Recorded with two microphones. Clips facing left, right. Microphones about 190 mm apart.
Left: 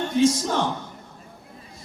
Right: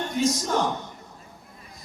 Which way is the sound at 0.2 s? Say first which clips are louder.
Left 5 dB; 30° left (ahead or behind).